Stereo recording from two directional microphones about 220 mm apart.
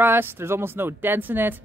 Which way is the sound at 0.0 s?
10° right (ahead or behind).